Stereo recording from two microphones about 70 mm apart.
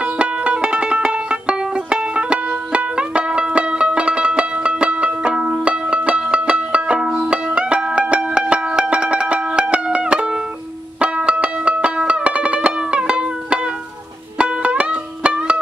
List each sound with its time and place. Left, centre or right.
0.0 s music: centre